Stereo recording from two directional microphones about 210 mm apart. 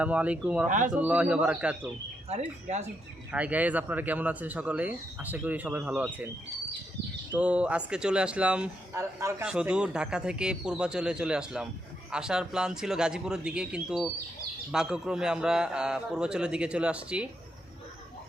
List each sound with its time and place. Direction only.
0.0 s speech: 5° right (ahead or behind)
0.7 s speech: 35° right (ahead or behind)
0.9 s speech: 5° right (ahead or behind)
3.3 s speech: 5° right (ahead or behind)
7.3 s speech: 5° right (ahead or behind)